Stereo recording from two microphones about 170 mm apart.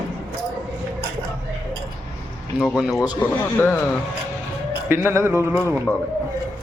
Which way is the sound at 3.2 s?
10° left (ahead or behind).